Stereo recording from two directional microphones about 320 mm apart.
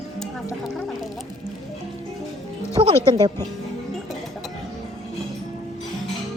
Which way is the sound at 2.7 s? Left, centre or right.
Centre.